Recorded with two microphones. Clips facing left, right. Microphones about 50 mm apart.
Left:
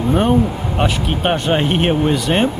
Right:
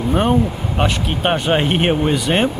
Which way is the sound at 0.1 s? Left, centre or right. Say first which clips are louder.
Left 1 dB; centre.